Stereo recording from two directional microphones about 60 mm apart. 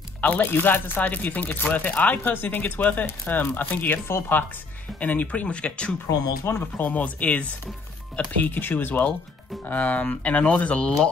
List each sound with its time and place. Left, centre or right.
0.2 s speech: left
6.0 s speech: left
6.8 s speech: left